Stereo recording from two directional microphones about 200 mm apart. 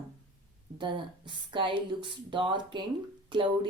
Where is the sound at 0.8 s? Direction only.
25° right (ahead or behind).